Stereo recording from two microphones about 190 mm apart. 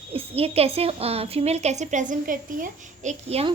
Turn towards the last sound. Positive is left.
turn(degrees=-35)  # may be behind; listen again after turning